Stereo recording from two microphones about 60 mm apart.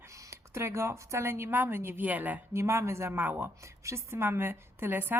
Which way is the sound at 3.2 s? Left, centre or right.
Right.